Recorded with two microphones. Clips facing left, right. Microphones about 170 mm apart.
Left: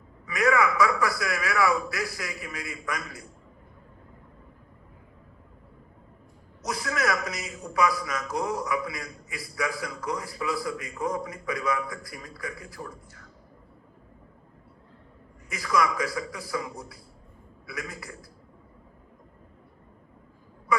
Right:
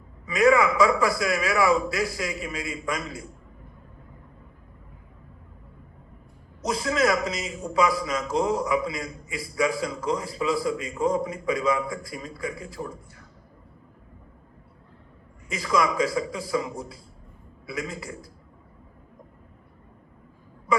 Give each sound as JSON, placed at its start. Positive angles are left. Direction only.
{"t": 0.3, "sound": "a man's voice", "side_deg": -25}
{"t": 6.6, "sound": "a man's voice", "side_deg": -25}
{"t": 15.4, "sound": "a man's voice", "side_deg": -20}